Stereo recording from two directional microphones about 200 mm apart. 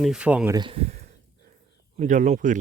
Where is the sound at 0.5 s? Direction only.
25° right (ahead or behind).